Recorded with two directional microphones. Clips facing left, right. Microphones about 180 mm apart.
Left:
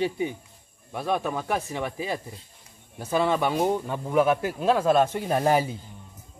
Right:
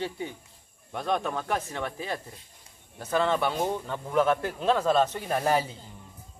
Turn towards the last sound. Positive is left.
turn(degrees=15)  # may be behind; listen again after turning